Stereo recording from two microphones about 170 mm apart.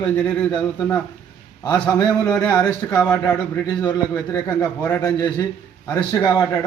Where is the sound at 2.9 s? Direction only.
10° left (ahead or behind).